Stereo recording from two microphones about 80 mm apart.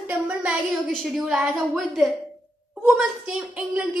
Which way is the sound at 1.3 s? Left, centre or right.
Centre.